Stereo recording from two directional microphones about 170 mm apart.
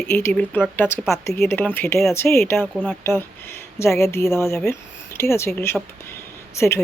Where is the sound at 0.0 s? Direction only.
10° left (ahead or behind).